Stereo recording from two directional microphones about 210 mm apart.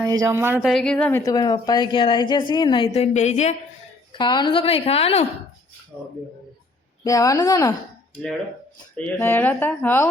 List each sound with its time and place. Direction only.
0.0 s speech: 15° right (ahead or behind); by 3.5 s 30° left (ahead or behind)
4.1 s speech: 20° left (ahead or behind)
5.9 s speech: 10° left (ahead or behind)
9.0 s speech: 10° left (ahead or behind)